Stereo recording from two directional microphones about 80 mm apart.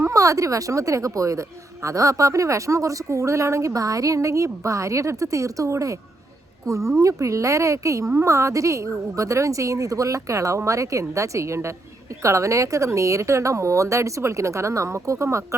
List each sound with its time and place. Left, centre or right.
0.0 s a woman's voice: right